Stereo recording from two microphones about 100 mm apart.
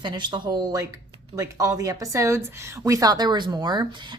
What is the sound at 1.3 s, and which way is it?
A woman's voice, 35° right (ahead or behind).